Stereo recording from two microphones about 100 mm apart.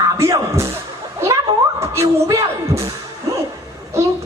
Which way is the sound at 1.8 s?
30° right (ahead or behind).